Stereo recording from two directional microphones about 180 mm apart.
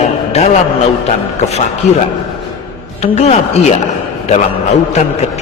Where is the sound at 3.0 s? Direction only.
35° left (ahead or behind).